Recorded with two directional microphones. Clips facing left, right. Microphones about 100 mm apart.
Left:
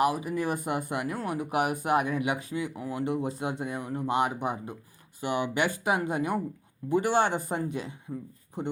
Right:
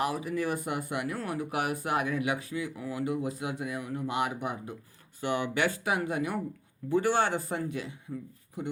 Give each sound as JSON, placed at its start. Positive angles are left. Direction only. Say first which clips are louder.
{"t": 0.0, "sound": "speech", "louder": "left 3 dB", "side_deg": 20}